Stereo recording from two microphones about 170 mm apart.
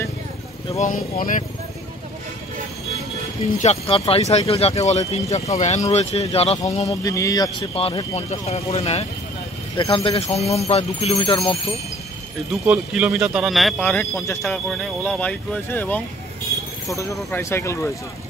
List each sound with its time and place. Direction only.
0.7 s speech: 50° left (ahead or behind)
3.6 s speech: 35° left (ahead or behind)
6.9 s speech: 20° left (ahead or behind)
7.7 s speech: 30° left (ahead or behind)
12.6 s speech: 5° right (ahead or behind); by 17.9 s 15° left (ahead or behind)